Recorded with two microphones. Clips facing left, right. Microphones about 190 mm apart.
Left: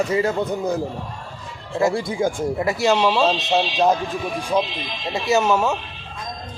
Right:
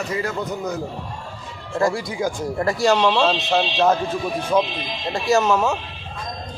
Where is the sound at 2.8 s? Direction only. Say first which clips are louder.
Even; 10° left (ahead or behind).